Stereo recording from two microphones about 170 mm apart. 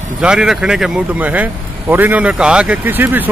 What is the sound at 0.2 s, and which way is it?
Speech, 5° right (ahead or behind).